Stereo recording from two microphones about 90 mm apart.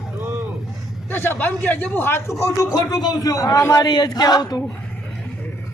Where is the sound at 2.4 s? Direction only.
40° left (ahead or behind).